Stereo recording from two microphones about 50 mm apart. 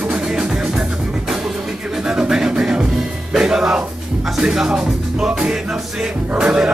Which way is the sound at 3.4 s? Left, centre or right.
Centre.